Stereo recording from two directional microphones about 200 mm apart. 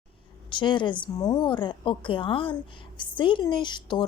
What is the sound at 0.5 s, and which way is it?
A woman's voice, 25° left (ahead or behind).